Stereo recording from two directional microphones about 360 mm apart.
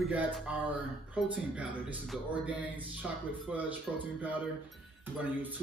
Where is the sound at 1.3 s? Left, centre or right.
Centre.